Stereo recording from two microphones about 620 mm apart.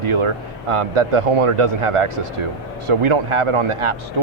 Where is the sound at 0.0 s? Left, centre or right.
Right.